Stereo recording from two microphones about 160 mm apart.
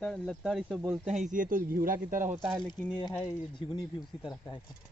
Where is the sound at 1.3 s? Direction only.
55° right (ahead or behind).